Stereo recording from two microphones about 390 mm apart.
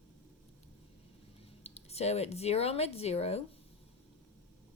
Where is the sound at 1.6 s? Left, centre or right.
Centre.